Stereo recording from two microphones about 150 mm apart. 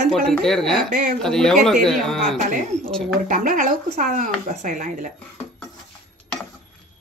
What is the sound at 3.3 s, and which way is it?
Speech, 60° right (ahead or behind).